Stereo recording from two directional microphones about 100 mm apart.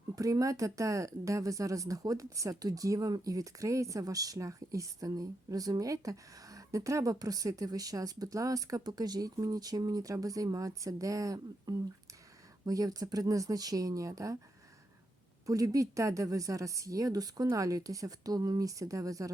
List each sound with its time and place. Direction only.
0.2 s a woman's voice: 35° right (ahead or behind)
15.4 s a woman's voice: 35° right (ahead or behind)